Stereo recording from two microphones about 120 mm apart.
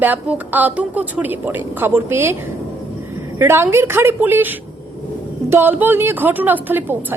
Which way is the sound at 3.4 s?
20° right (ahead or behind).